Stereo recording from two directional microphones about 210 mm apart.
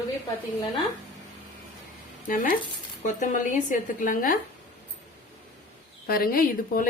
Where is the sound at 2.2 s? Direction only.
40° left (ahead or behind).